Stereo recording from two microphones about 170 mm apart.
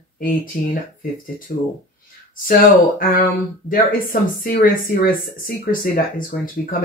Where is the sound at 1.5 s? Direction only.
60° left (ahead or behind).